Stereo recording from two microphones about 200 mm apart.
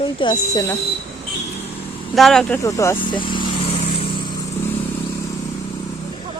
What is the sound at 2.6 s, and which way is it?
Speech, 15° left (ahead or behind).